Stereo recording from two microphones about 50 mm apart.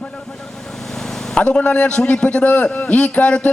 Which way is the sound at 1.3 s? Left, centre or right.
Left.